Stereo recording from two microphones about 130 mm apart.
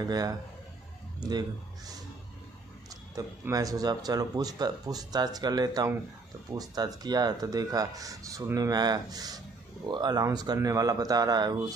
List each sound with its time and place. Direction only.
0.0 s speech: 30° right (ahead or behind)
3.2 s speech: 25° right (ahead or behind)